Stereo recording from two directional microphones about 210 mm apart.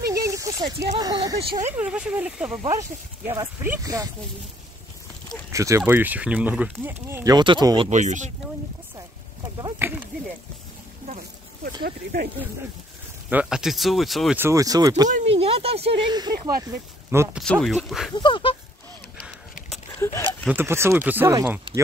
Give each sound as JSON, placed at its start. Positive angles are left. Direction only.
{"t": 0.1, "sound": "a sound", "side_deg": -15}
{"t": 0.7, "sound": "speech", "side_deg": -20}
{"t": 1.8, "sound": "speech", "side_deg": -5}
{"t": 5.5, "sound": "speech", "side_deg": -15}
{"t": 7.9, "sound": "speech", "side_deg": -35}
{"t": 9.6, "sound": "a sound", "side_deg": -10}
{"t": 11.8, "sound": "speech", "side_deg": -45}
{"t": 13.3, "sound": "speech", "side_deg": -5}
{"t": 14.4, "sound": "speech", "side_deg": -15}
{"t": 15.0, "sound": "speech", "side_deg": -30}
{"t": 17.4, "sound": "speech", "side_deg": 0}
{"t": 18.1, "sound": "speech", "side_deg": 25}
{"t": 20.0, "sound": "speech", "side_deg": 15}
{"t": 20.4, "sound": "speech", "side_deg": -10}